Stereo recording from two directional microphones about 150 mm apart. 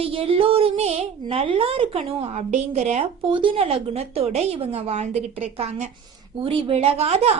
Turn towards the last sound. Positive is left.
turn(degrees=-45)  # may be behind; listen again after turning